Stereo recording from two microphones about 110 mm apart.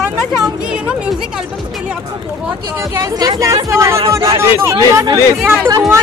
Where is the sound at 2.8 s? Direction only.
30° right (ahead or behind).